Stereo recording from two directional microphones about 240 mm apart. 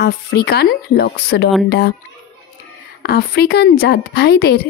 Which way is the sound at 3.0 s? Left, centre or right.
Left.